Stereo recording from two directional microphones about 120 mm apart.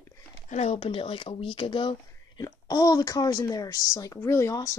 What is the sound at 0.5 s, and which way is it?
Speech, 70° left (ahead or behind).